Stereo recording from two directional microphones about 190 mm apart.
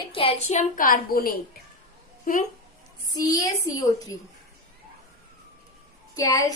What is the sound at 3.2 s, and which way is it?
Speech, 20° left (ahead or behind).